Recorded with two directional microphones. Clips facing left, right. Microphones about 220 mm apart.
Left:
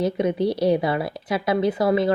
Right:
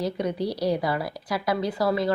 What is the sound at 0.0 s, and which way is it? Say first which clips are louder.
A woman's voice: left 5 dB; 25° left (ahead or behind).